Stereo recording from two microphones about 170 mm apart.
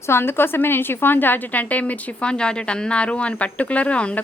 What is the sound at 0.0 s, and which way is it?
A woman's voice, 15° left (ahead or behind).